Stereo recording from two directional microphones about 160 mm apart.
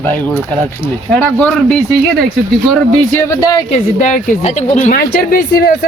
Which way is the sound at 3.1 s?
25° left (ahead or behind).